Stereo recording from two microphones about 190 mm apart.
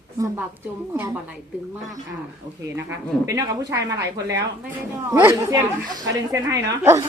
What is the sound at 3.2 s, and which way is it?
A woman's voice, 20° right (ahead or behind).